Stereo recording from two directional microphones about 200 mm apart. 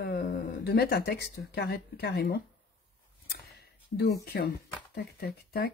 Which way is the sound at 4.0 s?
50° left (ahead or behind).